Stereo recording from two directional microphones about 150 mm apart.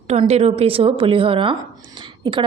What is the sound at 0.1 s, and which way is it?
A woman's voice, 45° right (ahead or behind).